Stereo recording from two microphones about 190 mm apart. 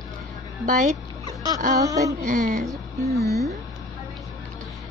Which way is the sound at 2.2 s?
45° right (ahead or behind).